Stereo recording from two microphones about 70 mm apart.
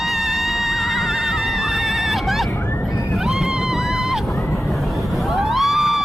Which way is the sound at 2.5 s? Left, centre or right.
Left.